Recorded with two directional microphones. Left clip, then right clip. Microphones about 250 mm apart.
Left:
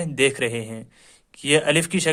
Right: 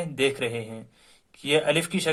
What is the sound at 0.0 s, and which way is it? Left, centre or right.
Speech, left.